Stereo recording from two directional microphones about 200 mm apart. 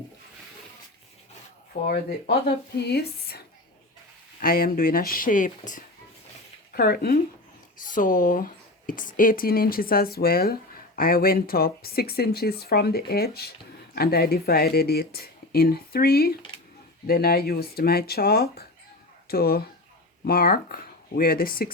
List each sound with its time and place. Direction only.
1.9 s speech: 50° left (ahead or behind)